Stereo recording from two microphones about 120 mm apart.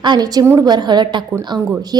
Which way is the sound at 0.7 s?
35° right (ahead or behind).